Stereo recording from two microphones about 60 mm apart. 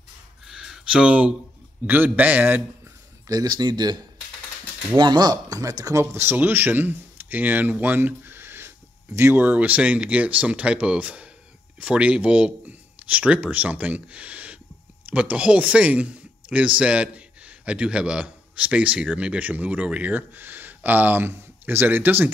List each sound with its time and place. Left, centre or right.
0.5 s a sound: centre
1.9 s speech: right
3.3 s speech: right
5.5 s speech: right
6.3 s speech: right
9.3 s a man's voice: right